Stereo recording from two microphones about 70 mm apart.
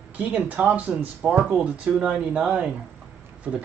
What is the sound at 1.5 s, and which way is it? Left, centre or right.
Speech, centre.